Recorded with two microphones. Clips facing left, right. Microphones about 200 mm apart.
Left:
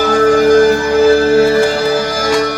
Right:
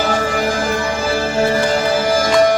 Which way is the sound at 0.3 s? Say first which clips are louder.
Left 11 dB; 40° left (ahead or behind).